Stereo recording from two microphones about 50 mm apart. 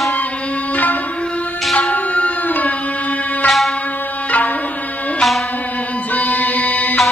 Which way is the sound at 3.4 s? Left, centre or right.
Centre.